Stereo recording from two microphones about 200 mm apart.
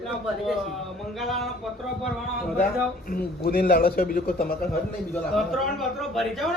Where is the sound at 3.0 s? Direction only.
50° left (ahead or behind).